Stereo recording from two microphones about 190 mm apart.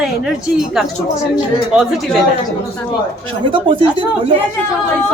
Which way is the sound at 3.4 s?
25° right (ahead or behind).